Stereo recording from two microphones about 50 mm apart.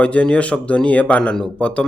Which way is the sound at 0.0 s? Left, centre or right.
Left.